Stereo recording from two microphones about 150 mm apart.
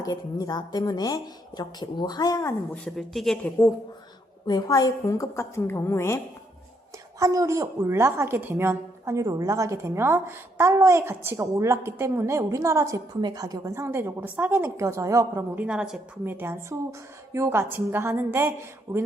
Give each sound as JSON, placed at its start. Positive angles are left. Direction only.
{"t": 0.0, "sound": "speech", "side_deg": 25}
{"t": 2.8, "sound": "speech", "side_deg": 0}
{"t": 4.4, "sound": "speech", "side_deg": 25}
{"t": 7.2, "sound": "a woman's voice", "side_deg": -20}
{"t": 15.6, "sound": "a woman's voice", "side_deg": -5}